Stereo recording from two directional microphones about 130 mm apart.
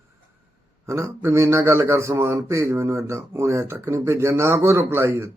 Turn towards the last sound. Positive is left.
turn(degrees=-20)  # may be behind; listen again after turning